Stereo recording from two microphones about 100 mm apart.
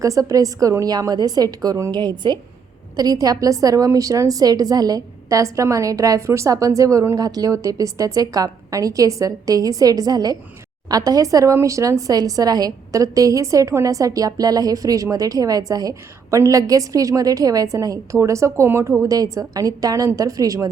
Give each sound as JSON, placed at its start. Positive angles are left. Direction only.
{"t": 0.0, "sound": "speech", "side_deg": -35}
{"t": 2.9, "sound": "speech", "side_deg": -40}